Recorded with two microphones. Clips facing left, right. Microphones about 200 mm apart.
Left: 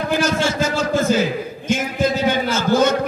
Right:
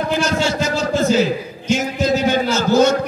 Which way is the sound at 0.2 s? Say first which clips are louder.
Even; 50° left (ahead or behind).